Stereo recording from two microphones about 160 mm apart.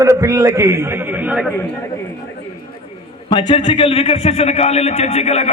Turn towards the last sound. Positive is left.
turn(degrees=40)  # may be behind; listen again after turning